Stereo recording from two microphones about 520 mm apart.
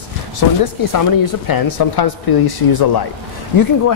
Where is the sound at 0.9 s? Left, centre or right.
Left.